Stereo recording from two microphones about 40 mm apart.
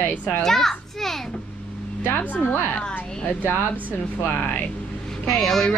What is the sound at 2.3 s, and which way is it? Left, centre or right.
Speech, left.